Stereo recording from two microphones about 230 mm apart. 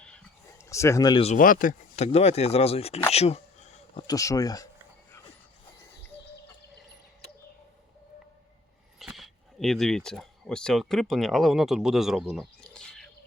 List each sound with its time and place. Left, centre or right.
0.0 s speech: centre; by 3.0 s left
3.1 s a sound: left
4.0 s speech: centre
9.0 s speech: centre